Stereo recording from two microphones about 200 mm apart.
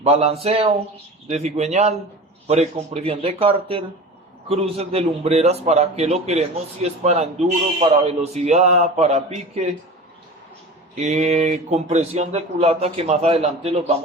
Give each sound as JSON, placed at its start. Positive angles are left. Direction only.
{"t": 0.0, "sound": "speech", "side_deg": -30}
{"t": 10.9, "sound": "speech", "side_deg": -35}